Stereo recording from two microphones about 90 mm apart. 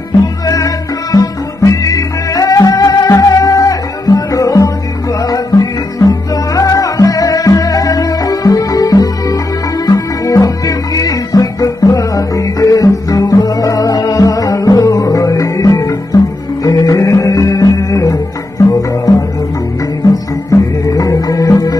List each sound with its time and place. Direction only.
1.1 s music: 40° left (ahead or behind)
20.4 s music: 40° left (ahead or behind)